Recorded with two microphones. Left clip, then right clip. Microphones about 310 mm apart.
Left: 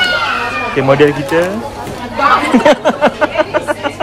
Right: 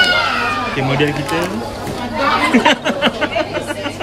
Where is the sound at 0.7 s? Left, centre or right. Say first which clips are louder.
Left 7 dB; centre.